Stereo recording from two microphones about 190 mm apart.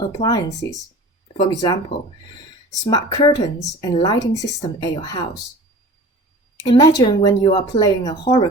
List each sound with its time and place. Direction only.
0.0 s speech: 20° left (ahead or behind)
2.8 s speech: 20° left (ahead or behind)
6.6 s speech: 20° left (ahead or behind)